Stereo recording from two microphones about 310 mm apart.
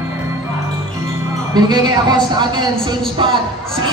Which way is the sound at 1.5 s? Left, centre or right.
Centre.